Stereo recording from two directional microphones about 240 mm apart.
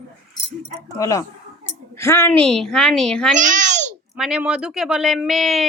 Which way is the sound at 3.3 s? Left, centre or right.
Right.